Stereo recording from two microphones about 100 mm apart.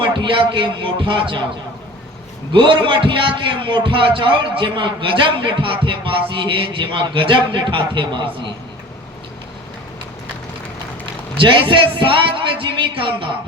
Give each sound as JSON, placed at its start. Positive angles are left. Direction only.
{"t": 0.0, "sound": "a man's voice", "side_deg": -55}
{"t": 2.5, "sound": "a man's voice", "side_deg": -55}
{"t": 11.0, "sound": "a man's voice", "side_deg": -55}